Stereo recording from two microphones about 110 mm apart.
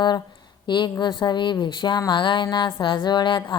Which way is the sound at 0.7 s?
45° left (ahead or behind).